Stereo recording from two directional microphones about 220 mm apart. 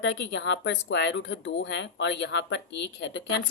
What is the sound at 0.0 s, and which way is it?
Speech, 55° left (ahead or behind).